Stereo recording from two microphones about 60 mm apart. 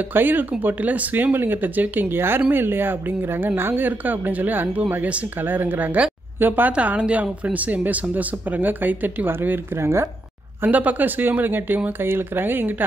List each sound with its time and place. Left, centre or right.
0.1 s speech: right
6.7 s speech: right
9.8 s speech: right
10.7 s speech: right